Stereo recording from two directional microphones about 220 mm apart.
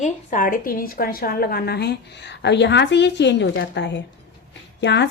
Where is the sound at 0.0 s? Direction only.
35° left (ahead or behind).